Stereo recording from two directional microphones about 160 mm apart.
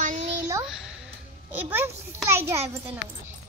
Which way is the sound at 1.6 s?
15° right (ahead or behind).